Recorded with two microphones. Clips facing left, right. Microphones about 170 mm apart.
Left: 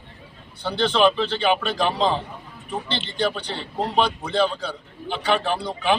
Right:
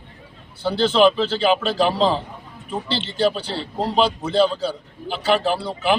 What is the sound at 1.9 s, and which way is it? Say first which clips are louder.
Speech: right 3 dB; 35° right (ahead or behind).